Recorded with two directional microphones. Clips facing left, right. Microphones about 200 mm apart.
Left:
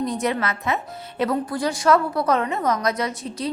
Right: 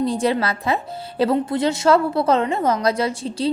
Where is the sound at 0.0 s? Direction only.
30° right (ahead or behind).